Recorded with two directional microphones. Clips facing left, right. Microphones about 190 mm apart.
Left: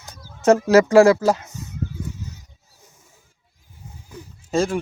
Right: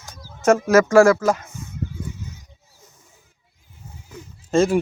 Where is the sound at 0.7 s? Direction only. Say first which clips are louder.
Left 1 dB; 30° left (ahead or behind).